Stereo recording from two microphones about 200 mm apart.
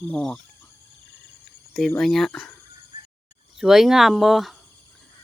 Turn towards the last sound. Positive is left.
turn(degrees=0)  # may be behind; listen again after turning